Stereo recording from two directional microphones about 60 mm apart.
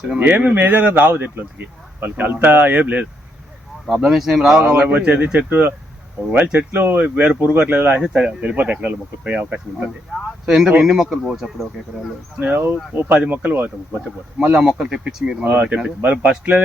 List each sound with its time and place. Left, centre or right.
0.2 s speech: right
3.8 s speech: centre
4.9 s speech: right
8.0 s speech: centre
10.4 s speech: centre
12.4 s speech: right; by 15.0 s centre
15.4 s speech: right